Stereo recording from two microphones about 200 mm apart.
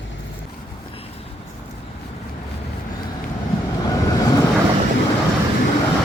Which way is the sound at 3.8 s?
20° left (ahead or behind).